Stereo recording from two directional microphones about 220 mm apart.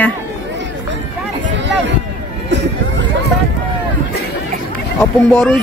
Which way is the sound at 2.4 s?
50° right (ahead or behind).